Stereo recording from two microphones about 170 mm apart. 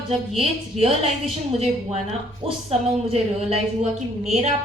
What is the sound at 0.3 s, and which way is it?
Speech, 35° right (ahead or behind).